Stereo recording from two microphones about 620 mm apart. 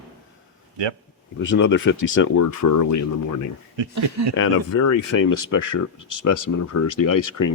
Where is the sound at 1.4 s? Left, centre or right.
Centre.